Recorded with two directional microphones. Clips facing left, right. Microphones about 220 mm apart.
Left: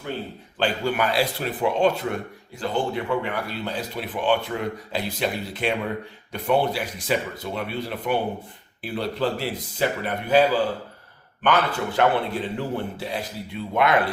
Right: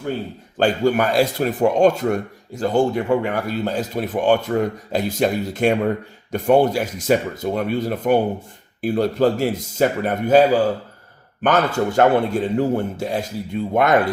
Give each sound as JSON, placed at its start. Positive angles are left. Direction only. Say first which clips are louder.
{"t": 0.5, "sound": "speech", "louder": "right 7 dB", "side_deg": -45}